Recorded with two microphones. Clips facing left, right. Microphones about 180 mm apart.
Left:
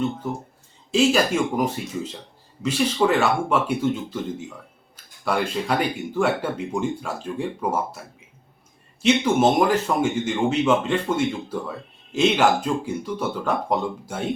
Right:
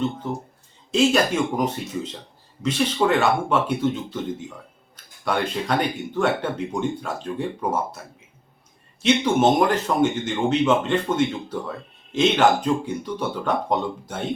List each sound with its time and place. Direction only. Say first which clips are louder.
0.9 s speech: even; 5° left (ahead or behind)
2.6 s speech: even; 5° left (ahead or behind)